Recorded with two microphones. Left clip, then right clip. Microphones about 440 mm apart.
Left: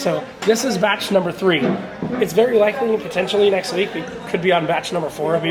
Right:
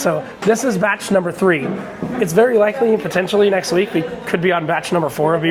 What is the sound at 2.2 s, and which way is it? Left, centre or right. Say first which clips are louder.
Speech: right 2 dB; right.